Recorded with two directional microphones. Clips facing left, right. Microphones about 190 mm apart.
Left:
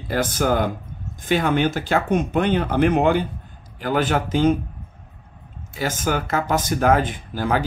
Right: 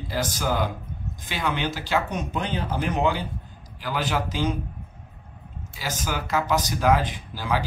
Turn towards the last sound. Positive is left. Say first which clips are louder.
# left 5 dB
turn(degrees=50)  # may be behind; listen again after turning